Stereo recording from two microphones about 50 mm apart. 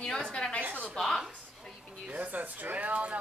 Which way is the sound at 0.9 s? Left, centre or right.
Centre.